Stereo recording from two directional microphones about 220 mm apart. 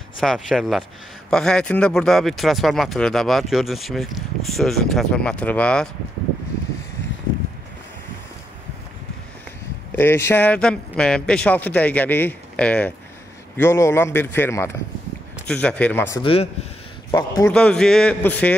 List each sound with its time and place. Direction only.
0.2 s speech: centre (ahead or behind)
9.9 s a man's voice: 10° left (ahead or behind)
16.2 s a man's voice: 25° left (ahead or behind)
17.5 s speech: 5° left (ahead or behind)